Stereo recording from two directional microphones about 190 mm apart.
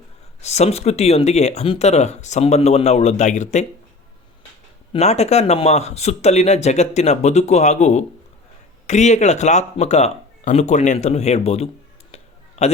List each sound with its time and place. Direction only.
0.4 s speech: 35° left (ahead or behind)
4.9 s speech: 35° left (ahead or behind)
12.1 s a sound: 35° left (ahead or behind)